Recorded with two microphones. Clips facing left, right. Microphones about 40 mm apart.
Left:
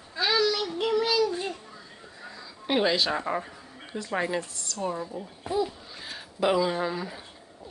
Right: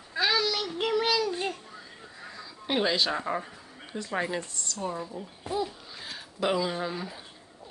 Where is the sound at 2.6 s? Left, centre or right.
Centre.